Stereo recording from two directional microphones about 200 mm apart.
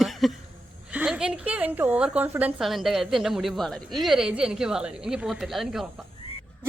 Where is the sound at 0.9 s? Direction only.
5° right (ahead or behind).